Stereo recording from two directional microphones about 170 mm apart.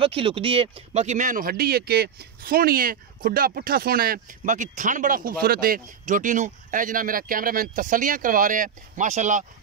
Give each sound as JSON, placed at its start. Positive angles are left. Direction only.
{"t": 0.0, "sound": "speech", "side_deg": -30}